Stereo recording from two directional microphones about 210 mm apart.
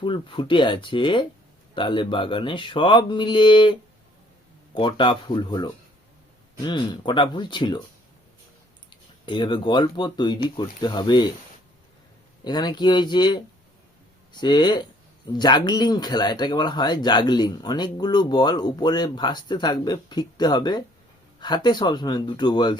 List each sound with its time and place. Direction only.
0.0 s speech: 25° left (ahead or behind)
8.9 s speech: 20° left (ahead or behind)
12.5 s speech: 20° left (ahead or behind)
14.4 s speech: 20° left (ahead or behind)